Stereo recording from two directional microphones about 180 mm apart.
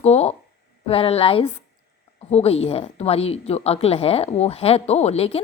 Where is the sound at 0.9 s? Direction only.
35° left (ahead or behind).